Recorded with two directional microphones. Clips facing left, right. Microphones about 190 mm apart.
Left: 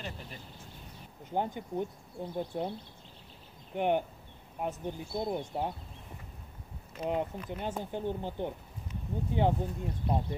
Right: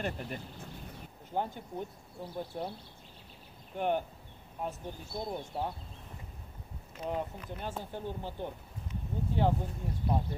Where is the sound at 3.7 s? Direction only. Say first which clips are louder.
Left 3 dB; 15° left (ahead or behind).